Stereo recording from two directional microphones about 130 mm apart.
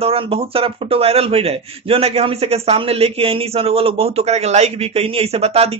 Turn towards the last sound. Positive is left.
turn(degrees=-50)  # may be behind; listen again after turning